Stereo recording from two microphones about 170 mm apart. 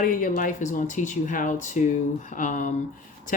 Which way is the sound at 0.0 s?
50° left (ahead or behind).